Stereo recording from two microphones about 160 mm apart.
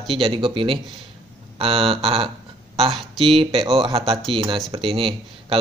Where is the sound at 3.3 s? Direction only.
35° right (ahead or behind).